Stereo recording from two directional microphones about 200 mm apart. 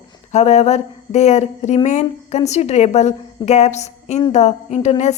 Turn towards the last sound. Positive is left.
turn(degrees=35)  # may be behind; listen again after turning